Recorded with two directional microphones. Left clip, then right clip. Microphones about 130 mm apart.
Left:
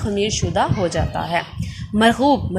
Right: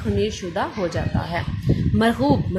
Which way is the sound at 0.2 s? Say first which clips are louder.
Left 6 dB; 15° left (ahead or behind).